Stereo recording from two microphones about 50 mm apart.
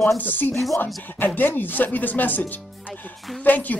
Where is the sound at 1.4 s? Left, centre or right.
Left.